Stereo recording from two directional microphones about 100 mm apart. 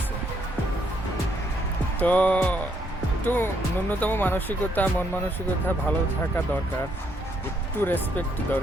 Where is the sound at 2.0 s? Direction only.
15° left (ahead or behind).